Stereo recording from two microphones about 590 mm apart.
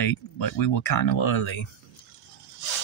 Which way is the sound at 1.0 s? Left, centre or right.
Left.